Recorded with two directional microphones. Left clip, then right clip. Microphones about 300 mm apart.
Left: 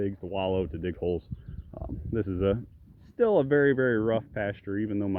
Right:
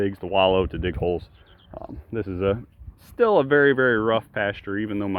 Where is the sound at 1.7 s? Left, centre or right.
Centre.